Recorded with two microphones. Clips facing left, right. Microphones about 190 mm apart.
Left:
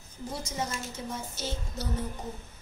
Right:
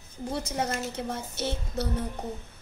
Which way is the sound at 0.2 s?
65° right (ahead or behind).